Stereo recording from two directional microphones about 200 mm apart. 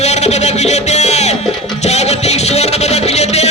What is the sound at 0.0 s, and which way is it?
Music, 35° left (ahead or behind).